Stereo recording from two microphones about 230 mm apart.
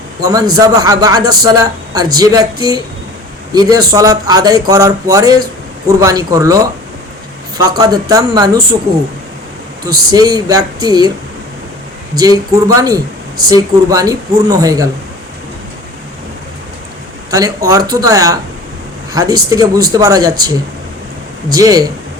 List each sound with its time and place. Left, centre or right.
0.2 s a man's voice: centre
9.8 s a man's voice: centre
12.1 s a man's voice: centre
17.3 s a man's voice: centre
21.5 s a man's voice: centre